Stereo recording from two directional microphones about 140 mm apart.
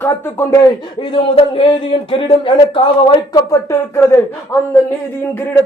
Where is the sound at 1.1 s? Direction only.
40° left (ahead or behind).